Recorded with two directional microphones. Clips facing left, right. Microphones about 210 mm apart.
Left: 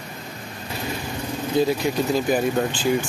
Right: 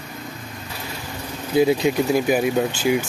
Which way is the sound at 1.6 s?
15° right (ahead or behind).